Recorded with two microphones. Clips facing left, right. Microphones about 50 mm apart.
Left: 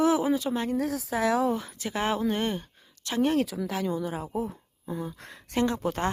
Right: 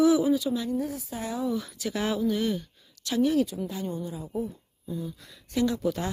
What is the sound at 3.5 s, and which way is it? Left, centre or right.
Speech, left.